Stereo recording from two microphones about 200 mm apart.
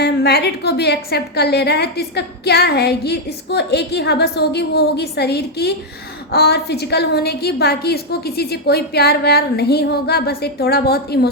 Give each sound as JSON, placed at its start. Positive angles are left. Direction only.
{"t": 0.0, "sound": "a woman's voice", "side_deg": 55}